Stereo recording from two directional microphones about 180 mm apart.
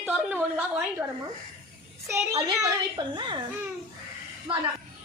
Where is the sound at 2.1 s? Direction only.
20° right (ahead or behind).